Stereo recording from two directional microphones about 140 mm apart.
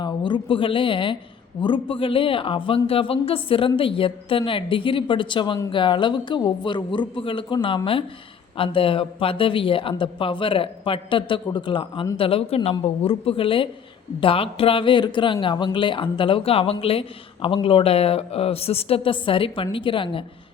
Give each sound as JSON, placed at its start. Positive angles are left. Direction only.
{"t": 0.0, "sound": "speech", "side_deg": 35}